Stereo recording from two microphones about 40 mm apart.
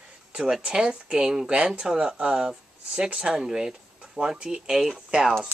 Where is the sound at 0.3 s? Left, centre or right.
Centre.